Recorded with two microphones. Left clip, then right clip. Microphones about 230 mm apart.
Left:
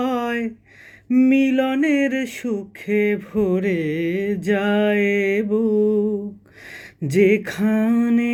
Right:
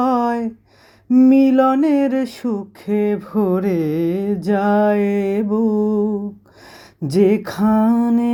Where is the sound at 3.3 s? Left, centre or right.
Right.